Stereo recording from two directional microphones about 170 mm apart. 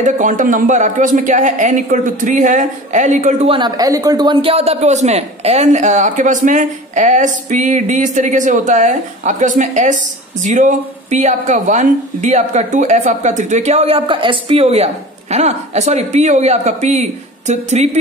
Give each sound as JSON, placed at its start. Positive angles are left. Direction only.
{"t": 0.0, "sound": "a man's voice", "side_deg": -50}
{"t": 3.5, "sound": "a man's voice", "side_deg": -25}